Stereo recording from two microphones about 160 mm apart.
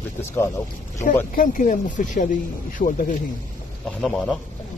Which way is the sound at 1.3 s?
55° left (ahead or behind).